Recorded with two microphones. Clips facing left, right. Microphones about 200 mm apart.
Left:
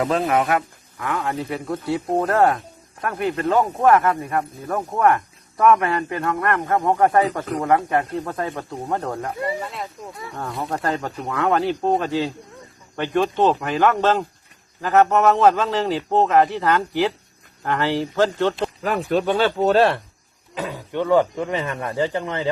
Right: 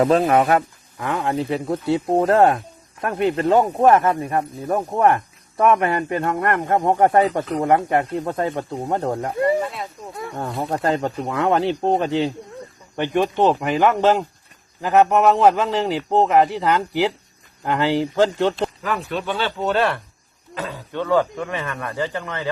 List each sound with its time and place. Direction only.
0.0 s speech: 30° right (ahead or behind)
1.1 s speech: 25° right (ahead or behind)
10.3 s a man's voice: 25° right (ahead or behind)
18.8 s speech: 45° left (ahead or behind)
20.6 s speech: 15° left (ahead or behind)